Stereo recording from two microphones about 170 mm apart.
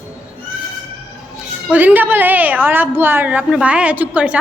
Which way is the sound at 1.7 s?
10° right (ahead or behind).